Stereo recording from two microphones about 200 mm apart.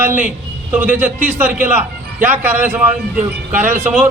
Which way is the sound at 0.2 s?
10° right (ahead or behind).